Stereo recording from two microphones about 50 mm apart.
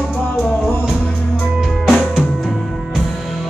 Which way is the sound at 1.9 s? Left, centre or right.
Centre.